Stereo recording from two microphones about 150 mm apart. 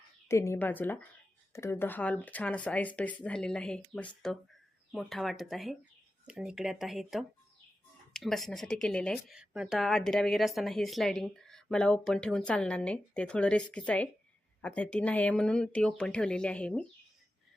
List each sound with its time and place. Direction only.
0.3 s speech: 20° left (ahead or behind)
9.3 s speech: 5° right (ahead or behind)